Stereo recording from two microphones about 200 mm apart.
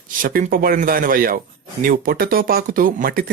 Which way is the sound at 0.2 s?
45° right (ahead or behind).